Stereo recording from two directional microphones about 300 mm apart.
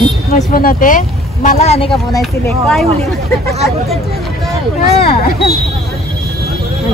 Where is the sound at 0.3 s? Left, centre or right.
Left; by 2.9 s centre.